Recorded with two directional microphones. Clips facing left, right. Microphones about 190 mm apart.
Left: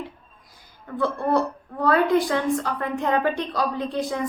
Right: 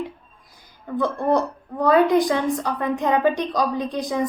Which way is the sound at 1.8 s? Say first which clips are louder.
Right 3 dB; 15° right (ahead or behind).